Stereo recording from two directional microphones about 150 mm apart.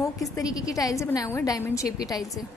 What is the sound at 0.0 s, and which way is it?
A woman's voice, 20° left (ahead or behind).